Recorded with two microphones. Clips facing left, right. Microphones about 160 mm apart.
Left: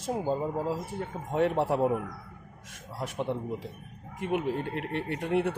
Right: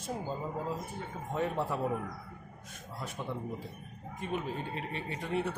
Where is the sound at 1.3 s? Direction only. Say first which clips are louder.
Left 7 dB; 70° left (ahead or behind).